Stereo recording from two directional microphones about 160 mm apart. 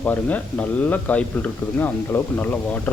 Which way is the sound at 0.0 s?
10° left (ahead or behind).